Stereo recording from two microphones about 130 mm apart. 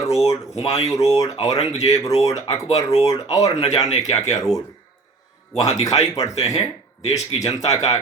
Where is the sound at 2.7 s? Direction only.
55° left (ahead or behind).